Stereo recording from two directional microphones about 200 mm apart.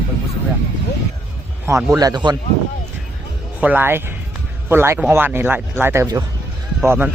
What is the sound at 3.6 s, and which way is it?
Speech, 10° right (ahead or behind).